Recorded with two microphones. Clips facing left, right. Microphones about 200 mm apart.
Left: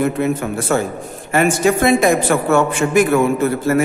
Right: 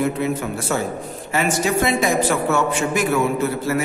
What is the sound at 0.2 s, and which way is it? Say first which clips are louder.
A man's voice: left 4 dB; 50° left (ahead or behind).